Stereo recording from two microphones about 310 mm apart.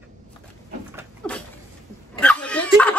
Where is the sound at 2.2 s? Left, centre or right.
Centre.